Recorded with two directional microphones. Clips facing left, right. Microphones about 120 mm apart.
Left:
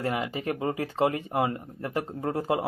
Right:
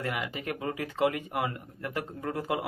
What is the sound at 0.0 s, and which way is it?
Speech, 30° left (ahead or behind).